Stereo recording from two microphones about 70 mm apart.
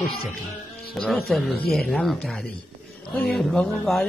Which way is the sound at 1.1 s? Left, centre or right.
Centre.